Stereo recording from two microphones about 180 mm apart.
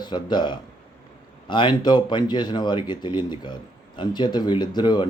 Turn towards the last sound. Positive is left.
turn(degrees=25)  # may be behind; listen again after turning